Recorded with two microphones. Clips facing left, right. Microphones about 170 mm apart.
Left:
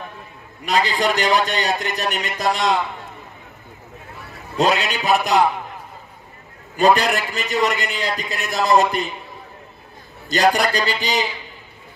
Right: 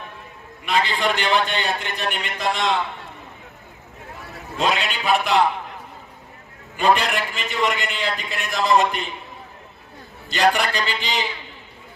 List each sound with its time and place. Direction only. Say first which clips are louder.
0.7 s a man's voice: left 2 dB; 40° left (ahead or behind)
4.6 s a man's voice: left 4 dB; 40° left (ahead or behind)
6.8 s a man's voice: left 3 dB; 40° left (ahead or behind)
10.3 s a man's voice: left 2 dB; 40° left (ahead or behind)